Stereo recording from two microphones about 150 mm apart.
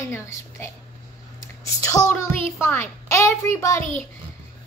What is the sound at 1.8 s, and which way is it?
A woman's voice, 25° left (ahead or behind).